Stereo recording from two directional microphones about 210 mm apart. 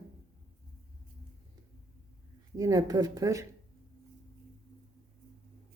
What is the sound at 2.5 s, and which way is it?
Speech, 15° right (ahead or behind).